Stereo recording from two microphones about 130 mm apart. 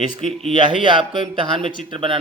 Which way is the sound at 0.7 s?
40° right (ahead or behind).